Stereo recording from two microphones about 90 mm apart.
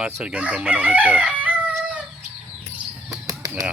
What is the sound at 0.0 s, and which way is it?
Chicken, 10° right (ahead or behind).